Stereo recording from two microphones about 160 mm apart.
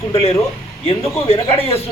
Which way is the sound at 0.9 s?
35° left (ahead or behind).